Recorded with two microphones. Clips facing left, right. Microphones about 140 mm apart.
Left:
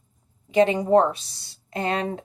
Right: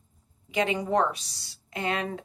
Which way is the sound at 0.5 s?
40° left (ahead or behind).